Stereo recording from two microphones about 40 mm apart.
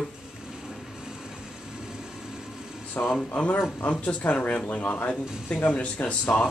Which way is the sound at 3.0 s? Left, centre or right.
Left.